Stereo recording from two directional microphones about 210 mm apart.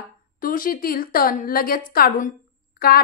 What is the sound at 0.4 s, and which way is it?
A woman's voice, 40° left (ahead or behind).